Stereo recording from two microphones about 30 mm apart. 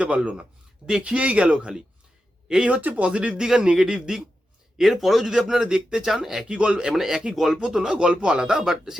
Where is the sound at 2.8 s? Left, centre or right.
Right.